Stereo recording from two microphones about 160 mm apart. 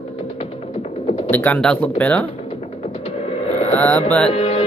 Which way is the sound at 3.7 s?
10° left (ahead or behind).